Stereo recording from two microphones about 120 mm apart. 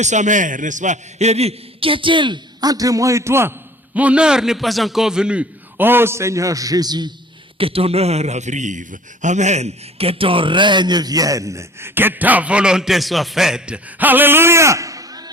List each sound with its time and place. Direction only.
0.0 s a man's voice: 85° right; by 7.1 s 35° right (ahead or behind)
7.6 s a man's voice: 50° right (ahead or behind); by 15.3 s 30° right (ahead or behind)